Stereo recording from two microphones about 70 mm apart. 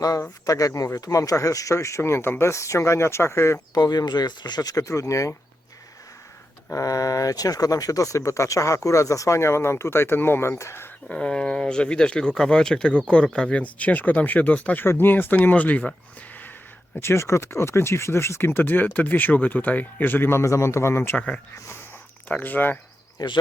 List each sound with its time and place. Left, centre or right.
0.4 s speech: left
3.8 s speech: left
6.7 s speech: left
11.1 s speech: centre
17.0 s speech: left
20.4 s speech: left
21.2 s speech: centre
22.3 s speech: left
23.2 s speech: left